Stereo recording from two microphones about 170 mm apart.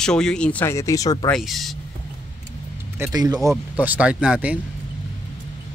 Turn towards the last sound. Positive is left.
turn(degrees=-5)  # may be behind; listen again after turning